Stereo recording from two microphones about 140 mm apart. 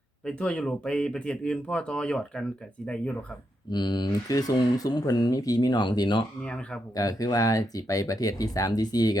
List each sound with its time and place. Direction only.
0.3 s speech: 5° left (ahead or behind)
3.7 s speech: 30° left (ahead or behind)
6.4 s speech: 5° left (ahead or behind)
6.9 s speech: 25° left (ahead or behind)